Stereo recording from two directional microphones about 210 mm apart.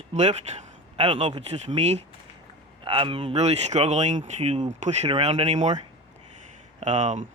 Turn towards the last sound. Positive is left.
turn(degrees=-35)  # may be behind; listen again after turning